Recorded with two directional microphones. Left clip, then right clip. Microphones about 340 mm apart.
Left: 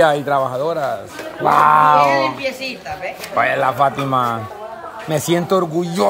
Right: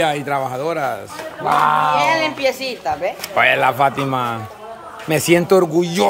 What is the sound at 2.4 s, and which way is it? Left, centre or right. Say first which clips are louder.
Speech: right 4 dB; centre.